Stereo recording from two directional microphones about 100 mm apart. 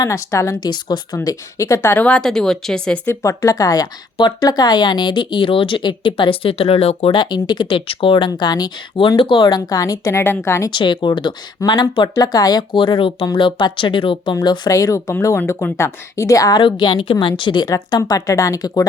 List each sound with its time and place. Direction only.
0.0 s a woman's voice: 30° left (ahead or behind); by 3.0 s 10° left (ahead or behind)
3.1 s a woman's voice: 35° left (ahead or behind); by 7.1 s 80° left
7.1 s a woman's voice: 50° left (ahead or behind)
8.3 s a woman's voice: 45° left (ahead or behind); by 10.7 s 25° left (ahead or behind)
10.7 s a woman's voice: 50° left (ahead or behind)
14.7 s a woman's voice: 35° left (ahead or behind)
15.4 s a woman's voice: 25° left (ahead or behind); by 16.6 s 40° left (ahead or behind)
16.6 s a woman's voice: 50° left (ahead or behind)